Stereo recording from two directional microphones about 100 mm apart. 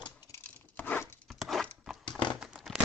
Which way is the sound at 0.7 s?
15° left (ahead or behind).